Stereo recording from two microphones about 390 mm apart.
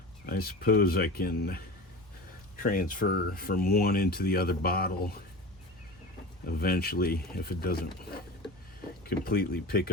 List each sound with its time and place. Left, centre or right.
0.3 s speech: left
2.6 s speech: left
6.6 s speech: left